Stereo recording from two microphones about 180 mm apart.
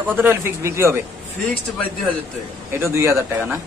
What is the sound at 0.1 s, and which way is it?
Speech, 10° right (ahead or behind).